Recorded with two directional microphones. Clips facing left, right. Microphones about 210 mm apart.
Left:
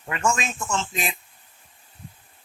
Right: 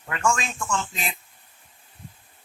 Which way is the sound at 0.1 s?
20° left (ahead or behind).